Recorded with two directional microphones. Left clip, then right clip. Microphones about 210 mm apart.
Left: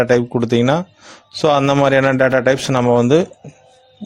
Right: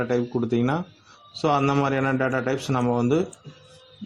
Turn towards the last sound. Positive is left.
turn(degrees=40)  # may be behind; listen again after turning